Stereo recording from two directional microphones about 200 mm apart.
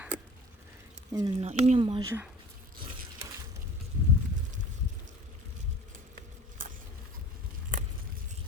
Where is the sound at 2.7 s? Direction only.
20° right (ahead or behind).